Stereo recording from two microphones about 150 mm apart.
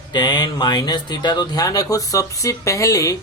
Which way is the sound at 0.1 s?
30° left (ahead or behind).